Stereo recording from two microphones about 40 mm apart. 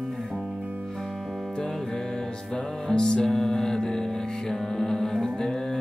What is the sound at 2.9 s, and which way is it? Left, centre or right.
Music, centre.